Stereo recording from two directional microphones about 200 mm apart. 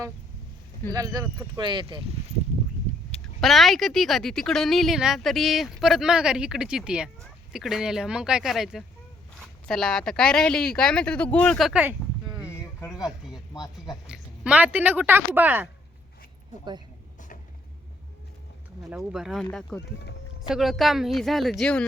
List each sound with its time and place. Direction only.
0.9 s speech: 20° right (ahead or behind)
3.4 s speech: centre (ahead or behind)
13.1 s a sound: centre (ahead or behind)
13.5 s speech: 20° left (ahead or behind)
14.1 s speech: 5° right (ahead or behind)
18.9 s speech: centre (ahead or behind)